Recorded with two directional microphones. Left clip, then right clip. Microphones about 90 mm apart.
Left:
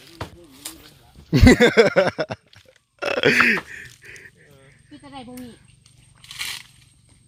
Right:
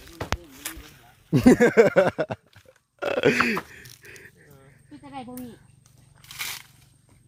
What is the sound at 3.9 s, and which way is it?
Mechanisms, 20° right (ahead or behind).